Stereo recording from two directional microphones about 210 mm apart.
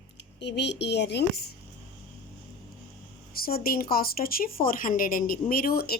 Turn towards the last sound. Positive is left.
turn(degrees=45)  # may be behind; listen again after turning